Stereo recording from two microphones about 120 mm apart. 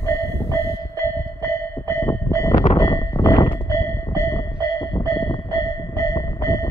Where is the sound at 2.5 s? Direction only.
90° left.